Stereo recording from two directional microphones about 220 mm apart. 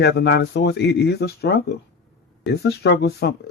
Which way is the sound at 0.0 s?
50° left (ahead or behind).